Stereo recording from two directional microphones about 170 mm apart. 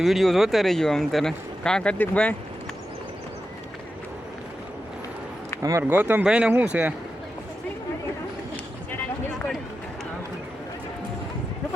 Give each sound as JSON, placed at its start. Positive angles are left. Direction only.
{"t": 0.0, "sound": "speech", "side_deg": 0}
{"t": 5.6, "sound": "speech", "side_deg": -15}
{"t": 8.9, "sound": "a sound", "side_deg": 0}